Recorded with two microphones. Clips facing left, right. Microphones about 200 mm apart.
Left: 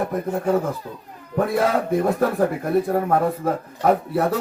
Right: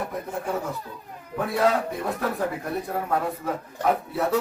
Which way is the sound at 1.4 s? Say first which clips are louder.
Left 3 dB; 50° left (ahead or behind).